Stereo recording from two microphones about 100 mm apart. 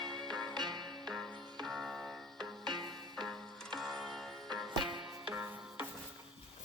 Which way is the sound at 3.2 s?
Centre (ahead or behind).